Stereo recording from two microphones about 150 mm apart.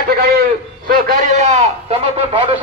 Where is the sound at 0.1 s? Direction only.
90° right; by 1.3 s 75° right (ahead or behind).